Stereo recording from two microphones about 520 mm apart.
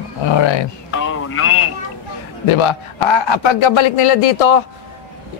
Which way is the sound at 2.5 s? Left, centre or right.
Left.